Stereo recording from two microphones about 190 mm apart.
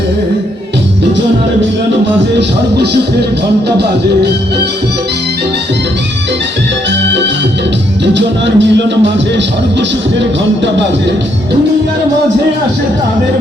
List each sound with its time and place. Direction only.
2.7 s music: 60° right (ahead or behind)
8.0 s music: 65° right (ahead or behind)